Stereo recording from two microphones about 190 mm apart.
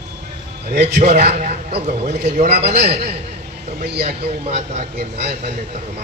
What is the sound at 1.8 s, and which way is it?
Speech, 35° right (ahead or behind).